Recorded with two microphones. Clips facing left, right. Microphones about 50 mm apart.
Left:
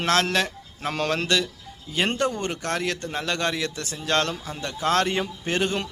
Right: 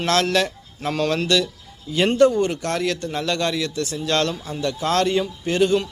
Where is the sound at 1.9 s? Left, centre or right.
Centre.